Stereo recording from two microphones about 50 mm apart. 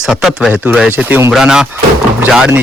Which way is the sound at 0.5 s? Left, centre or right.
Right.